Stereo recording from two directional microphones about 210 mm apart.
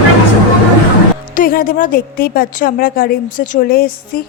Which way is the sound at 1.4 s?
40° left (ahead or behind).